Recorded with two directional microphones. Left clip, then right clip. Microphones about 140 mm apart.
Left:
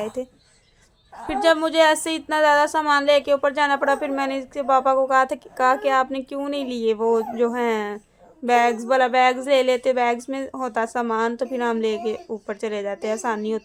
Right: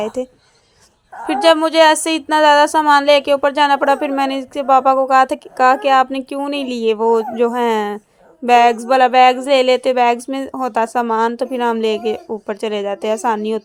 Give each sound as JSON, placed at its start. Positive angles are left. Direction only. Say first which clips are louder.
{"t": 0.0, "sound": "speech", "louder": "right 7 dB", "side_deg": -35}
{"t": 1.3, "sound": "speech", "louder": "right 6 dB", "side_deg": -30}